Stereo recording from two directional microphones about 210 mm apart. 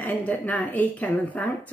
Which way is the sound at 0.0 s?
10° left (ahead or behind).